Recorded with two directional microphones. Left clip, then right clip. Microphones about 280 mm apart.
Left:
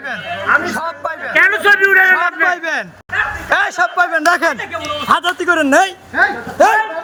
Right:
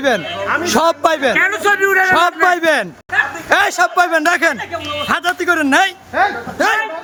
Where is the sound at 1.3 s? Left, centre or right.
Centre.